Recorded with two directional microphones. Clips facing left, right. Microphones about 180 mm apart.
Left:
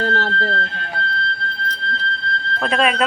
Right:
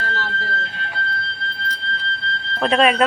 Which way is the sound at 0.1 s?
55° left (ahead or behind).